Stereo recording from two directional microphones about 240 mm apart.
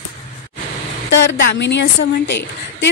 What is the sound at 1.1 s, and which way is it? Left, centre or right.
A woman's voice, left.